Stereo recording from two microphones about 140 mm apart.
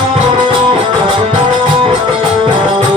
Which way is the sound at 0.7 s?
35° right (ahead or behind).